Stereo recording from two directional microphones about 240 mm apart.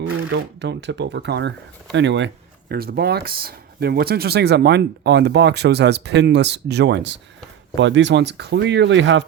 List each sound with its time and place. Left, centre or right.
0.0 s speech: right